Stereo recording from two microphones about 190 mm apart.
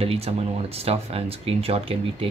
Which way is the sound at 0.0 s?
30° right (ahead or behind).